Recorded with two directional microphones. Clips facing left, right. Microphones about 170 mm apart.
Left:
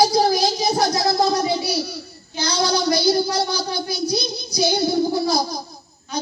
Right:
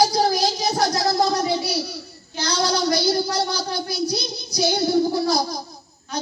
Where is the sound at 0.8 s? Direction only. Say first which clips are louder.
Even; 15° left (ahead or behind).